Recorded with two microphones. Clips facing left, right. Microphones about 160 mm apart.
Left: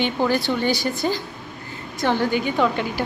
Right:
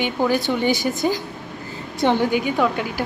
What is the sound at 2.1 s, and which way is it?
Speech, 15° right (ahead or behind).